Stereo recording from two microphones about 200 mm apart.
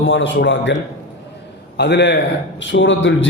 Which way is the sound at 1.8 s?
60° left (ahead or behind).